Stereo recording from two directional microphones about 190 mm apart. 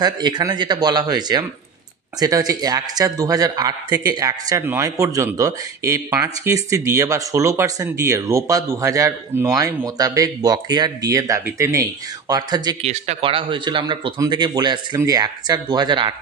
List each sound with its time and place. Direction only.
0.0 s a man's voice: 20° right (ahead or behind)
12.8 s speech: 35° right (ahead or behind)